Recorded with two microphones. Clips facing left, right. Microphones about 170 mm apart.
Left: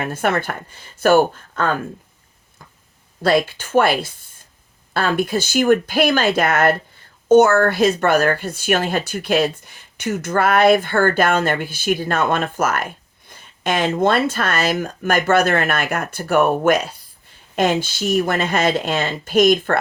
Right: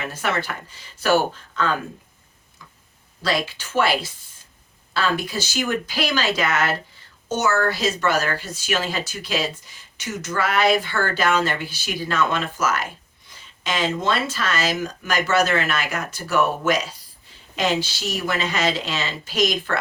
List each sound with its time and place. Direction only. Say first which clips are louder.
0.0 s speech: left 5 dB; 55° left (ahead or behind)
2.6 s a sound: left 2 dB; 50° left (ahead or behind)
3.2 s speech: left 7 dB; 55° left (ahead or behind)